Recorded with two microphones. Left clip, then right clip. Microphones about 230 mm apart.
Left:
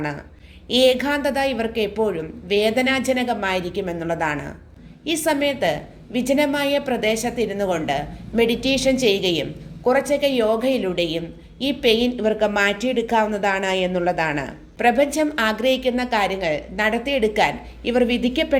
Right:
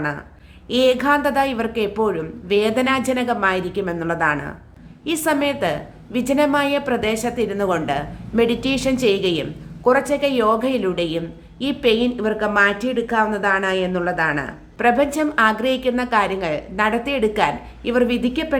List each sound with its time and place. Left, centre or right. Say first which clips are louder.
0.7 s a woman's voice: right 1 dB; centre